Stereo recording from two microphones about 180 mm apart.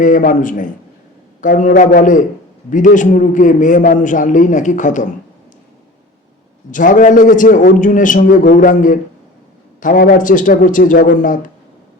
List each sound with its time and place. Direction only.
0.0 s a man's voice: 45° left (ahead or behind)
6.7 s a man's voice: 45° left (ahead or behind)